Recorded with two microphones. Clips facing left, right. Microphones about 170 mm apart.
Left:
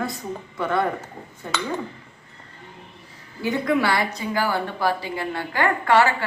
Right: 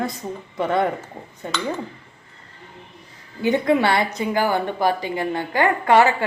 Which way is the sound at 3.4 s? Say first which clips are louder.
Right 4 dB; 25° right (ahead or behind).